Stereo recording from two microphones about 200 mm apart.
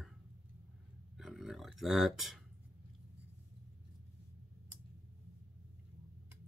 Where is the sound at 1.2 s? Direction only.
Centre (ahead or behind).